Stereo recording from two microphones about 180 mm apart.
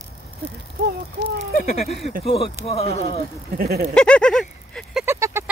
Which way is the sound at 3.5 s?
55° right (ahead or behind).